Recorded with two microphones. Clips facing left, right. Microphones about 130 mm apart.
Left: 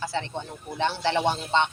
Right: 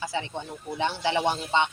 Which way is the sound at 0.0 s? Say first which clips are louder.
Left 1 dB; 15° right (ahead or behind).